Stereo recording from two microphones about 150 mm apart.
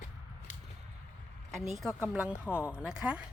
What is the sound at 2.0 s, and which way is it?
Speech, 5° right (ahead or behind).